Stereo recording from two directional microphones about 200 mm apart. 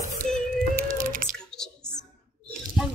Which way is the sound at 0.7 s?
40° right (ahead or behind).